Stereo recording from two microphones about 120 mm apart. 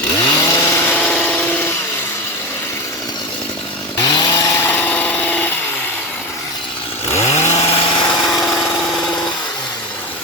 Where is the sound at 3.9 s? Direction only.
35° left (ahead or behind); by 5.5 s 15° left (ahead or behind).